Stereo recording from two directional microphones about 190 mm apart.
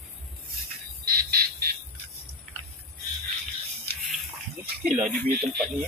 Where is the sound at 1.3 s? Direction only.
50° right (ahead or behind).